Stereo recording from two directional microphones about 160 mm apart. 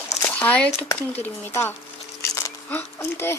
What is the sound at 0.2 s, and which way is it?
Speech, 10° left (ahead or behind).